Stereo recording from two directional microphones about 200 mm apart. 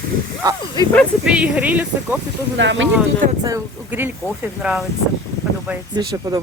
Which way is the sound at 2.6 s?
65° right (ahead or behind).